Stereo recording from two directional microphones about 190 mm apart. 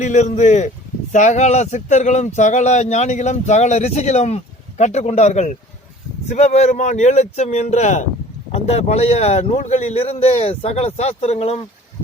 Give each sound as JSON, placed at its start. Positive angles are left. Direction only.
{"t": 0.0, "sound": "speech", "side_deg": 40}